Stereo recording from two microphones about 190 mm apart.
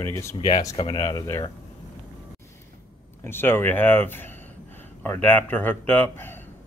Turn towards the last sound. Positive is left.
turn(degrees=10)  # may be behind; listen again after turning